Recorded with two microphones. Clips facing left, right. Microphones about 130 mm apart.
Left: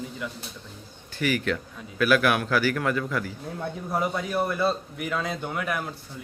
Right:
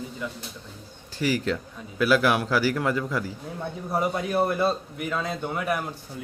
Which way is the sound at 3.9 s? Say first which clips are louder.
Right 2 dB; 5° right (ahead or behind).